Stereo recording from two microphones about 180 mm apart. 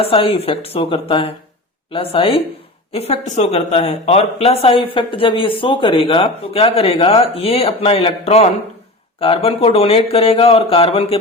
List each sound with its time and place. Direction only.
0.0 s speech: 30° left (ahead or behind)